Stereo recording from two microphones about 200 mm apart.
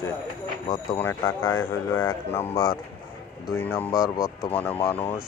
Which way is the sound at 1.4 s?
90° left.